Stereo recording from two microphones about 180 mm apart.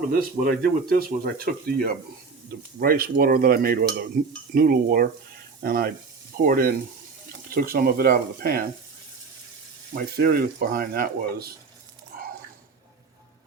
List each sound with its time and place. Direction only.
0.1 s speech: 55° right (ahead or behind)
9.9 s speech: 55° right (ahead or behind)